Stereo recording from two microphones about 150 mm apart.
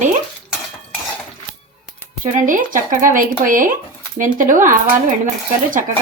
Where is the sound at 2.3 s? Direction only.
60° right (ahead or behind).